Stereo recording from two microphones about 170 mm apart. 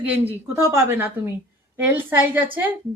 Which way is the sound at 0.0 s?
10° right (ahead or behind).